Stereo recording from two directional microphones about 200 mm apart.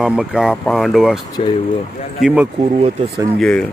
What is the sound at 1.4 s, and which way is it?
Speech, 30° left (ahead or behind).